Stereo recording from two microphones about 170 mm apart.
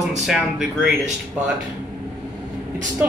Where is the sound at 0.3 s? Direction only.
5° right (ahead or behind).